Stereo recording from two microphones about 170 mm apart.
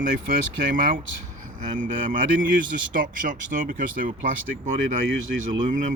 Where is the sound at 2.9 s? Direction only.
50° right (ahead or behind).